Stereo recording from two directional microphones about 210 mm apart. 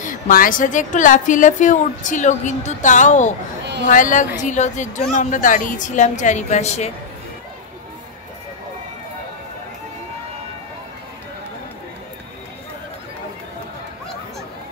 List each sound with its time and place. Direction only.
0.0 s a woman's voice: 40° left (ahead or behind)